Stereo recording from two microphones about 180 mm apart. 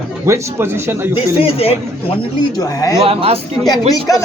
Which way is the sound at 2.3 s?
20° left (ahead or behind).